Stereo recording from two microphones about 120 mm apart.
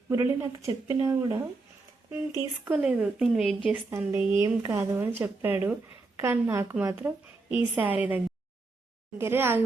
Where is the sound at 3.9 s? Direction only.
20° right (ahead or behind).